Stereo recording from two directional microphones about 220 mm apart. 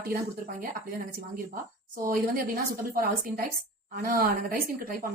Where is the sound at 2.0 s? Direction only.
40° right (ahead or behind).